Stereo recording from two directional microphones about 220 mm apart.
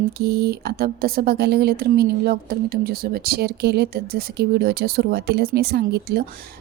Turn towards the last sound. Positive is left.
turn(degrees=-45)  # may be behind; listen again after turning